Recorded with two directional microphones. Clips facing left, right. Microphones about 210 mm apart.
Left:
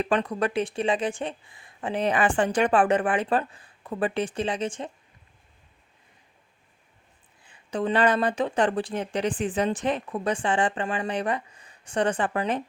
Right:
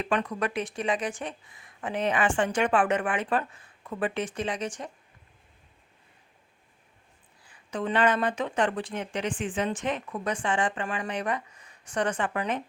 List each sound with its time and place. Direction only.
0.0 s speech: 35° left (ahead or behind)
7.4 s speech: 30° left (ahead or behind)